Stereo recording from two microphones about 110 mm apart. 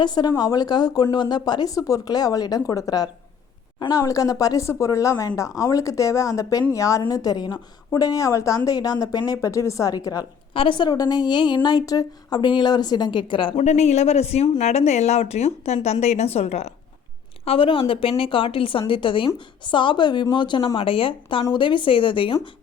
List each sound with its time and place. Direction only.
0.0 s speech: 40° left (ahead or behind)
10.5 s a woman's voice: 50° left (ahead or behind)
13.6 s a man's voice: 90° left; by 16.7 s 75° left (ahead or behind)
17.4 s a woman's voice: 60° left (ahead or behind)